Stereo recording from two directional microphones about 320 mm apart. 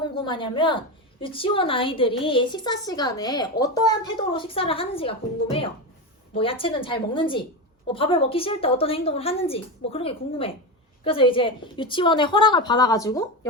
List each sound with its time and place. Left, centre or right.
0.2 s a woman's voice: centre